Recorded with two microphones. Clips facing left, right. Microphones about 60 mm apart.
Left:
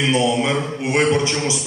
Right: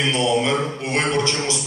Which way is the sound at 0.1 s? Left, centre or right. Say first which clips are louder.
Left 2 dB; centre.